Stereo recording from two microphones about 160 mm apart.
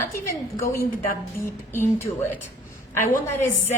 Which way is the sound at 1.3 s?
15° left (ahead or behind).